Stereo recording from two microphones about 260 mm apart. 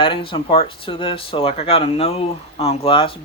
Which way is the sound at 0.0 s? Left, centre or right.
Centre.